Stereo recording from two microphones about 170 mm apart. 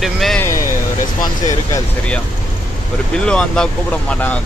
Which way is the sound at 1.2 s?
20° left (ahead or behind).